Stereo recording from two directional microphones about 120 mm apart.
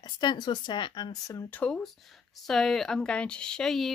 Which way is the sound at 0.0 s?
35° left (ahead or behind).